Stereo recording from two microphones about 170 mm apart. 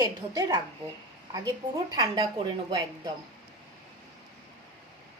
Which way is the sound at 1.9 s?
25° right (ahead or behind).